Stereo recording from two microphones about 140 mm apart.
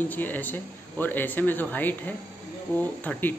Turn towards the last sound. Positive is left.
turn(degrees=10)  # may be behind; listen again after turning